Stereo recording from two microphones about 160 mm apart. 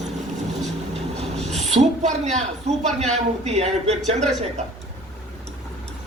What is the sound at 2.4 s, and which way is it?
A man's voice, 45° right (ahead or behind).